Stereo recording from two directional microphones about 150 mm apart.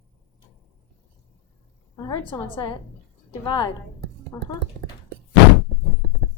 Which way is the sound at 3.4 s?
30° left (ahead or behind).